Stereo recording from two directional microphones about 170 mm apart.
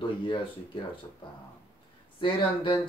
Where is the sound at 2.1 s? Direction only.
30° left (ahead or behind).